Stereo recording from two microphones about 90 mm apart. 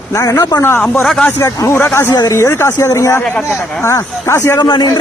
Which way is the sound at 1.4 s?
35° left (ahead or behind).